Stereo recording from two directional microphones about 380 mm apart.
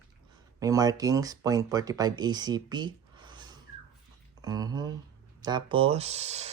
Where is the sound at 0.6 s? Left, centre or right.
Centre.